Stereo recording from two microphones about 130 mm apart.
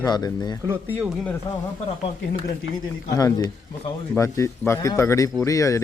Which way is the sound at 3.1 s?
30° left (ahead or behind).